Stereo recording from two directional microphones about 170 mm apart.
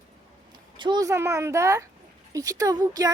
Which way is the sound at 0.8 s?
25° right (ahead or behind).